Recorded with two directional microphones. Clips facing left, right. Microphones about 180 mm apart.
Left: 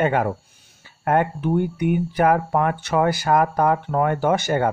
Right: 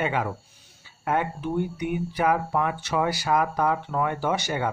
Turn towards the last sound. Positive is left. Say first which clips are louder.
# left 6 dB
turn(degrees=50)  # may be behind; listen again after turning